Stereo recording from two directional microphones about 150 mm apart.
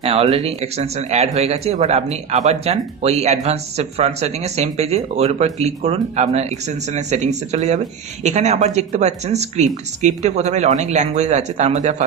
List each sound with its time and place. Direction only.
0.0 s speech: 40° right (ahead or behind)